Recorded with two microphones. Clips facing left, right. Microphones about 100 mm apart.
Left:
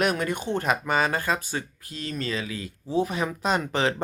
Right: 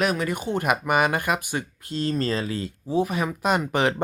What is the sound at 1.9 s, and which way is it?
Speech, 30° right (ahead or behind).